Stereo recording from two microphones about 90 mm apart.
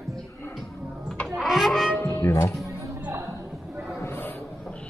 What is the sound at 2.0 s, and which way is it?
Music, 25° left (ahead or behind).